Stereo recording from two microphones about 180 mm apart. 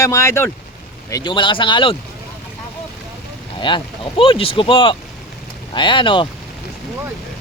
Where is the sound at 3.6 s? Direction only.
25° left (ahead or behind).